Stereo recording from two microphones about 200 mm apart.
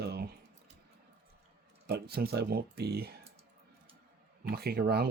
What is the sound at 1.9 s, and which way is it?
Speech, 50° right (ahead or behind).